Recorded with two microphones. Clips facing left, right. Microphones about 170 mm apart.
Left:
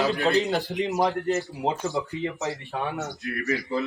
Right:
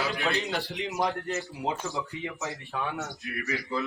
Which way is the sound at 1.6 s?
20° left (ahead or behind).